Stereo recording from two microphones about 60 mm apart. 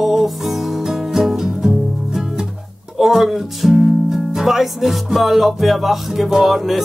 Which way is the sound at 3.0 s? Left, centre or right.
Centre.